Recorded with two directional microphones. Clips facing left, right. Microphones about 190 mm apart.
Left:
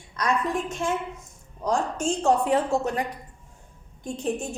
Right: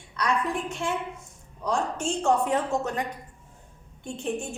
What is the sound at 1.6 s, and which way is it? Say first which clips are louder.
A woman's voice: left 2 dB; 40° left (ahead or behind).